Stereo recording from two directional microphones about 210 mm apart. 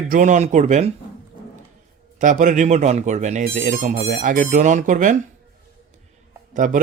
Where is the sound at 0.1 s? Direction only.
35° right (ahead or behind).